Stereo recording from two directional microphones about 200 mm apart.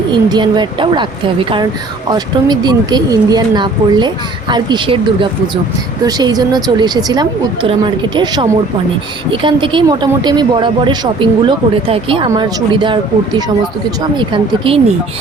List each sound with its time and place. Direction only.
0.1 s speech: 20° right (ahead or behind)